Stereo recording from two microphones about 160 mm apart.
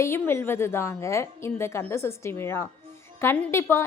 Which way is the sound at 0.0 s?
15° left (ahead or behind).